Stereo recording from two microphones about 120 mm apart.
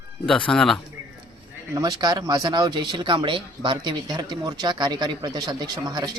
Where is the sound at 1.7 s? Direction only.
30° right (ahead or behind).